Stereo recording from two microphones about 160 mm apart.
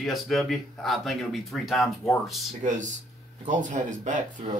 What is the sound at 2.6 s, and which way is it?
Speech, 50° right (ahead or behind).